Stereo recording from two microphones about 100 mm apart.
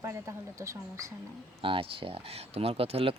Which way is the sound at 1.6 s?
65° right (ahead or behind).